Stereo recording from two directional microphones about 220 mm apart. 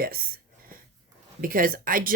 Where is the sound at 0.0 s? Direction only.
40° right (ahead or behind).